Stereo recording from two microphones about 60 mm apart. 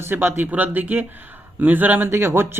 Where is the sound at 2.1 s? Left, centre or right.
Right.